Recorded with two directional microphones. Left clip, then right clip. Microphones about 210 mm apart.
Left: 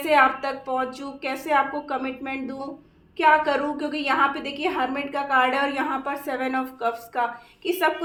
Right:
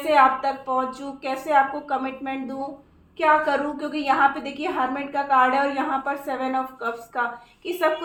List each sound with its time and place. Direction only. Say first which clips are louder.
0.0 s a woman's voice: right 1 dB; 40° left (ahead or behind)